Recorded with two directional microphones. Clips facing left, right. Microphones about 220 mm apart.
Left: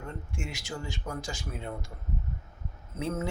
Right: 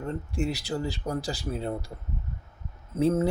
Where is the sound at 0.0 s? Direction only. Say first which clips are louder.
Right 9 dB; 35° right (ahead or behind).